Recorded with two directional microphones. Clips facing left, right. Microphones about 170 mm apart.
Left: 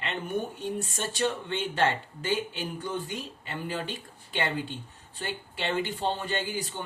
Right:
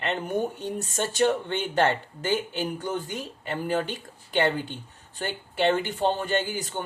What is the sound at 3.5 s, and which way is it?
Speech, 55° right (ahead or behind).